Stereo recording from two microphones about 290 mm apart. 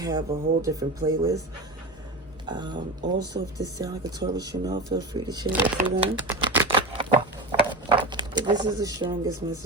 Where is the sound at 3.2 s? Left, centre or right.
Right.